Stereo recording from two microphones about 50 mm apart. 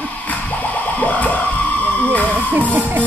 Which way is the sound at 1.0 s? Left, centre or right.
Left.